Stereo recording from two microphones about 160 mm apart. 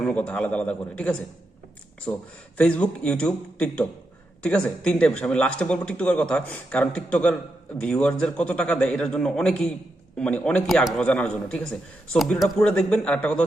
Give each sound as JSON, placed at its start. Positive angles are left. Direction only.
{"t": 0.0, "sound": "a man's voice", "side_deg": 5}
{"t": 2.1, "sound": "speech", "side_deg": 20}
{"t": 2.6, "sound": "a man's voice", "side_deg": 5}